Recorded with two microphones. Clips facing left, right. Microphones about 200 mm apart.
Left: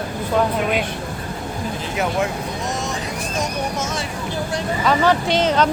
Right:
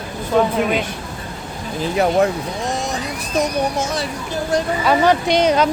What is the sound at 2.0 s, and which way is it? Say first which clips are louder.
Speech: right 6 dB; 35° right (ahead or behind).